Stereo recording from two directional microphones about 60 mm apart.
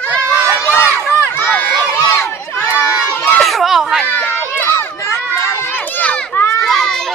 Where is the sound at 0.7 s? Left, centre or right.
Left.